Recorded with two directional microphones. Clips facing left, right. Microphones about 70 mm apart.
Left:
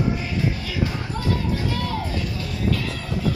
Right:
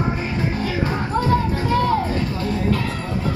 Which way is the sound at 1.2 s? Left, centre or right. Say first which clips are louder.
Right 5 dB; right.